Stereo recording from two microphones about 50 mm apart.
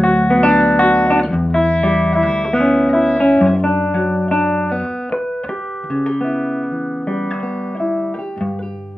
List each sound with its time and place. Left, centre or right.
0.0 s music: centre